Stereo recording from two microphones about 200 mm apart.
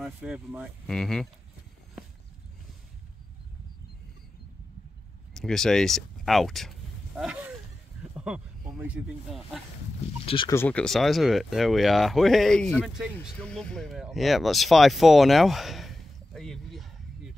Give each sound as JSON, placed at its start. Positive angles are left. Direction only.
{"t": 0.0, "sound": "speech", "side_deg": -5}
{"t": 5.3, "sound": "speech", "side_deg": 0}
{"t": 8.7, "sound": "speech", "side_deg": -5}
{"t": 10.2, "sound": "speech", "side_deg": 25}
{"t": 10.5, "sound": "speech", "side_deg": 10}